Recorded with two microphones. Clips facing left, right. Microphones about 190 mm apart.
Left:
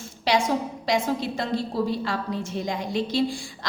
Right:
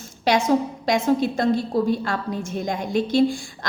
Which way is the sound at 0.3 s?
45° right (ahead or behind).